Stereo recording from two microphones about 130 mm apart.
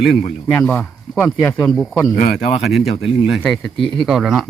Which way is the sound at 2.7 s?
5° right (ahead or behind).